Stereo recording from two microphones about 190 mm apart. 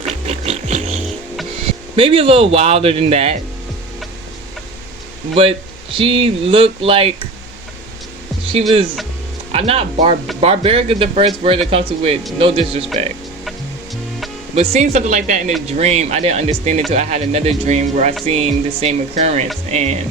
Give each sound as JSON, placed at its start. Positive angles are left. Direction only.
{"t": 0.3, "sound": "vehicle", "side_deg": -35}
{"t": 2.0, "sound": "speech", "side_deg": -30}
{"t": 5.3, "sound": "speech", "side_deg": -30}
{"t": 9.5, "sound": "speech", "side_deg": -30}
{"t": 14.5, "sound": "speech", "side_deg": -35}